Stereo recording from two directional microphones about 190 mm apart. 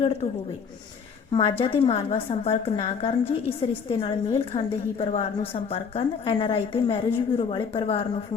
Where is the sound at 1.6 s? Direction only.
30° left (ahead or behind).